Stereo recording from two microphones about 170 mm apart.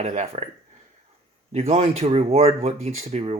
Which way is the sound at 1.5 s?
40° right (ahead or behind).